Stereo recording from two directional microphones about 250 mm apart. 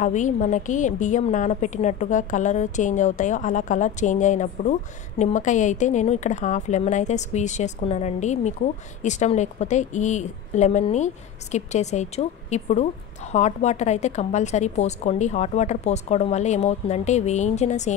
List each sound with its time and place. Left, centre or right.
0.0 s a woman's voice: left